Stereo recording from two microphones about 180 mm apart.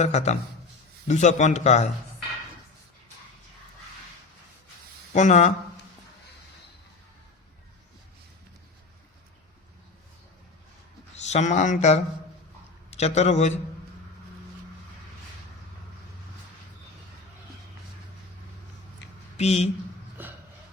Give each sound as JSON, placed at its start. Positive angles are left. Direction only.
{"t": 0.0, "sound": "speech", "side_deg": 40}
{"t": 5.1, "sound": "speech", "side_deg": 40}
{"t": 11.2, "sound": "a man's voice", "side_deg": 40}
{"t": 19.4, "sound": "speech", "side_deg": 35}
{"t": 20.2, "sound": "a sound", "side_deg": -10}